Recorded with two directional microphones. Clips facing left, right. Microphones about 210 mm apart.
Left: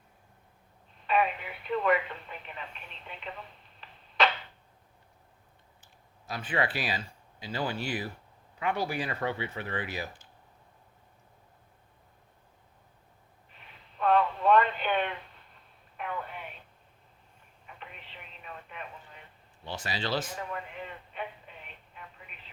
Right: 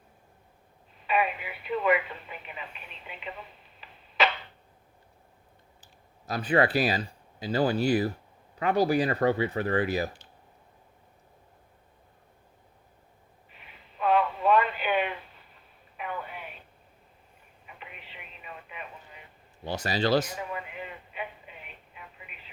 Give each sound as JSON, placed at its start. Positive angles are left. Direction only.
{"t": 1.0, "sound": "speech", "side_deg": -5}
{"t": 5.8, "sound": "speech", "side_deg": -40}
{"t": 14.0, "sound": "radio", "side_deg": -5}
{"t": 16.0, "sound": "telephone", "side_deg": -5}
{"t": 17.7, "sound": "telephone", "side_deg": -5}
{"t": 19.6, "sound": "speech", "side_deg": -40}
{"t": 20.3, "sound": "a sound", "side_deg": -5}
{"t": 22.0, "sound": "telephone", "side_deg": -5}